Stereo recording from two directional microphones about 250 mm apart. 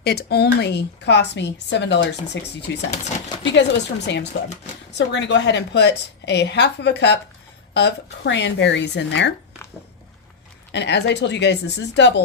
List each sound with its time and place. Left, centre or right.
0.0 s speech: left
10.7 s speech: left